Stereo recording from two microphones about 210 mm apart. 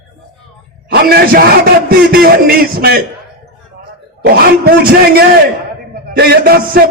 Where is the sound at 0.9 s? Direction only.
50° right (ahead or behind).